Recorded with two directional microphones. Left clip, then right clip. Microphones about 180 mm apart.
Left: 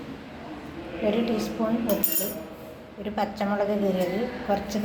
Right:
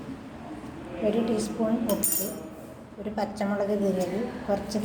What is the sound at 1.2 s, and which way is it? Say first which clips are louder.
Speech: left 1 dB; 15° right (ahead or behind).